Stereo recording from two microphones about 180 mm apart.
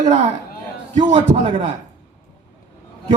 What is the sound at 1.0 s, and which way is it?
Speech, 40° right (ahead or behind).